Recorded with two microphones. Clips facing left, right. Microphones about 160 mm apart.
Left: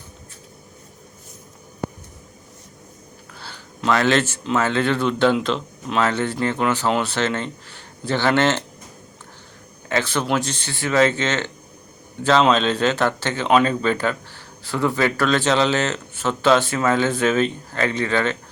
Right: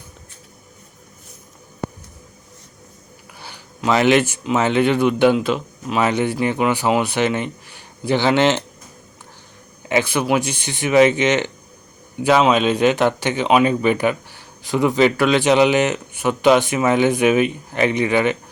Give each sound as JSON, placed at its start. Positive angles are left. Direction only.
{"t": 3.3, "sound": "speech", "side_deg": -15}
{"t": 9.9, "sound": "speech", "side_deg": -10}